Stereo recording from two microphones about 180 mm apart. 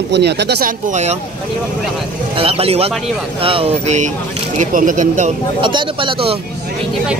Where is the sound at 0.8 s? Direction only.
40° right (ahead or behind).